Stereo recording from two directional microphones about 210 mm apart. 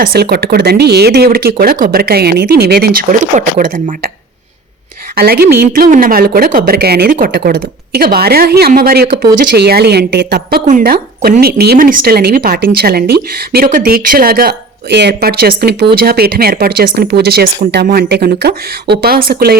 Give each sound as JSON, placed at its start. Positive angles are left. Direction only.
{"t": 0.0, "sound": "a woman's voice", "side_deg": -50}
{"t": 5.1, "sound": "a woman's voice", "side_deg": -45}